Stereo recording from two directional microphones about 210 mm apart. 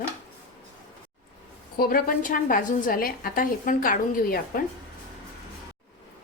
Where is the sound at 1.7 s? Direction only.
45° left (ahead or behind).